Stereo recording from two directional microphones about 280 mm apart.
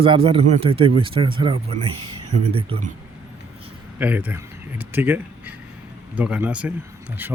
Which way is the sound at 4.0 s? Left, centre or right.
Centre.